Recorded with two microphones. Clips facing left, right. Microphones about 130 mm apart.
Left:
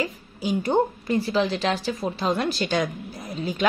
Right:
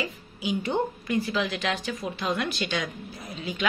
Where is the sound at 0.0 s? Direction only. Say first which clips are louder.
Left 4 dB; 40° left (ahead or behind).